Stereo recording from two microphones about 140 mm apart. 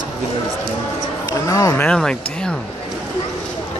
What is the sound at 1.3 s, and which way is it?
Speech, 20° left (ahead or behind).